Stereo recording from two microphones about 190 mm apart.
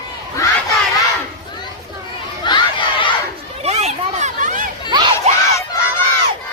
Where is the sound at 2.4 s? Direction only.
25° left (ahead or behind).